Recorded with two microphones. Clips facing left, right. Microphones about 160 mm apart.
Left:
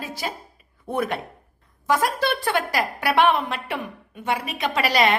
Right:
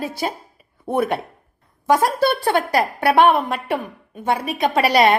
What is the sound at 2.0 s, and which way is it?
Speech, 30° right (ahead or behind).